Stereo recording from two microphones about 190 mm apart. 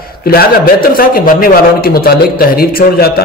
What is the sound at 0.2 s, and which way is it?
A man's voice, 55° left (ahead or behind).